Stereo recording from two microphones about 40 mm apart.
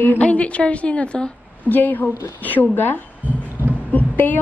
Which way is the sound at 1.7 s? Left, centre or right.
Left.